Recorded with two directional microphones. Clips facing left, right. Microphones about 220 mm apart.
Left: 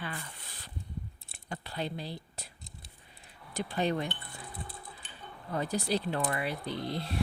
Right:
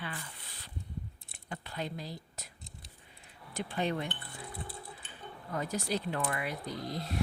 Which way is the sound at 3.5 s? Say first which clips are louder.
Left 3 dB; 35° left (ahead or behind).